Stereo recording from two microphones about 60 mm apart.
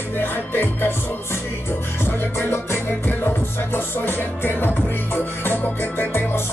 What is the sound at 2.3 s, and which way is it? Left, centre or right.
Music, left.